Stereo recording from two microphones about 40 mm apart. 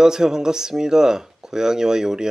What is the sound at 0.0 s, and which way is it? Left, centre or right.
Speech, centre.